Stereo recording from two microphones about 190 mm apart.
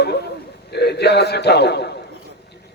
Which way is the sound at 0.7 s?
60° left (ahead or behind).